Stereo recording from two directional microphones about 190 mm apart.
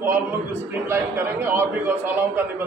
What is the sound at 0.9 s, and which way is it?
A man's voice, 10° right (ahead or behind).